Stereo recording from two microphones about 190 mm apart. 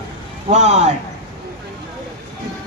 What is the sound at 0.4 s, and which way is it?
Speech, 35° right (ahead or behind).